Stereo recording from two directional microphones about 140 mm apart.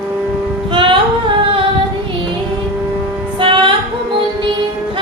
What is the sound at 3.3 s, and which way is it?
Music, 35° right (ahead or behind).